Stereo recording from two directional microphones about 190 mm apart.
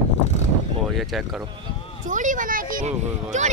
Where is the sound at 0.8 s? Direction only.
Centre (ahead or behind).